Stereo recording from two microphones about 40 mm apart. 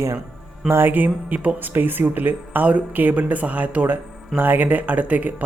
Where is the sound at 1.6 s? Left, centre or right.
Right.